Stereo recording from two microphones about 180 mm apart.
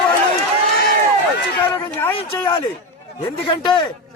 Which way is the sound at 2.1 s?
25° left (ahead or behind).